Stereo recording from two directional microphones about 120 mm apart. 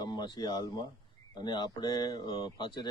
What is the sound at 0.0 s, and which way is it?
Speech, 40° left (ahead or behind).